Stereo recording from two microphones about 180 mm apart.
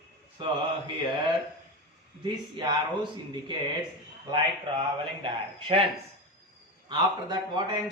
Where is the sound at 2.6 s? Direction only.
25° right (ahead or behind).